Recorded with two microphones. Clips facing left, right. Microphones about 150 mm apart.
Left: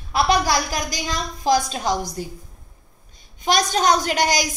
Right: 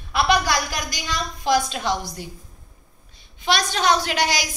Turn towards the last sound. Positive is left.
turn(degrees=45)  # may be behind; listen again after turning